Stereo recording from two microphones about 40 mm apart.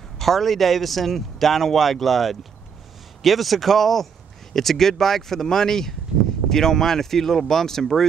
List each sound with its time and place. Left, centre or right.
0.2 s a man's voice: centre